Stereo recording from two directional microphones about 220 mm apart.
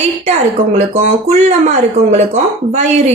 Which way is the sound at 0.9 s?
30° right (ahead or behind).